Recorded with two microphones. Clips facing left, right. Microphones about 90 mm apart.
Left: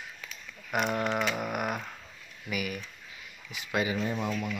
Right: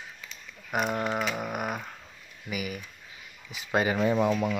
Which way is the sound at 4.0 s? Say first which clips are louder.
Right 7 dB; 90° right.